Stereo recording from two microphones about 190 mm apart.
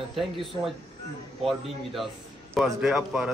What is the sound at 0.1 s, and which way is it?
Speech, centre (ahead or behind).